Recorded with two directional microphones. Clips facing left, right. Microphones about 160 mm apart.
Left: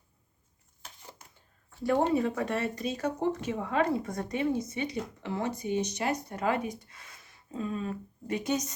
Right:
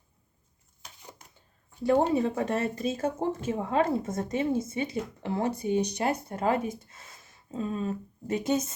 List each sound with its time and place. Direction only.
1.8 s speech: 25° right (ahead or behind)